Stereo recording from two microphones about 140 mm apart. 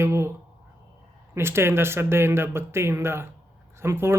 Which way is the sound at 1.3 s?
20° right (ahead or behind).